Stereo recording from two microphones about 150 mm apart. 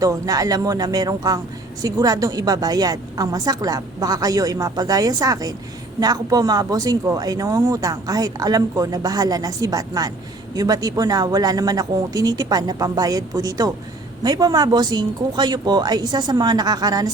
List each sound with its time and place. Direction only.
0.0 s speech: 25° right (ahead or behind)